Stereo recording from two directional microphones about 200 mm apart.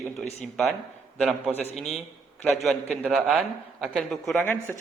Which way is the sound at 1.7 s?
Centre (ahead or behind).